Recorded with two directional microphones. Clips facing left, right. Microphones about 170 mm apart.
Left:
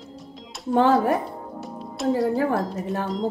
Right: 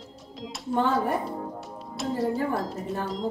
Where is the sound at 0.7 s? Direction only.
90° left.